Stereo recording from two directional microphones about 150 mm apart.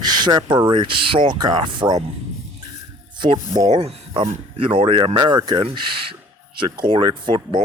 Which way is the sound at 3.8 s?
40° right (ahead or behind).